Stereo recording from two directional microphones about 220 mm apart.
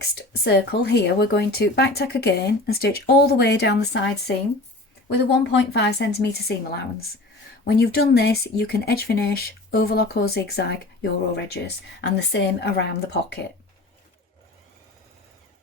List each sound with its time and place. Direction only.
0.0 s speech: 45° left (ahead or behind)
5.0 s speech: 50° left (ahead or behind)
7.6 s speech: 50° left (ahead or behind)